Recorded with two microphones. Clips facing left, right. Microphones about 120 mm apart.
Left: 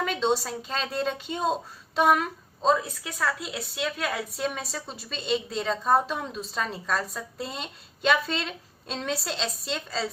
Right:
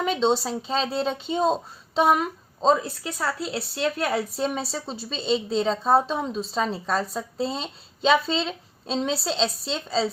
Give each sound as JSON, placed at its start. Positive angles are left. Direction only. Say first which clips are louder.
{"t": 0.0, "sound": "a woman's voice", "louder": "right 3 dB", "side_deg": -30}
{"t": 3.8, "sound": "speech", "louder": "right 6 dB", "side_deg": -30}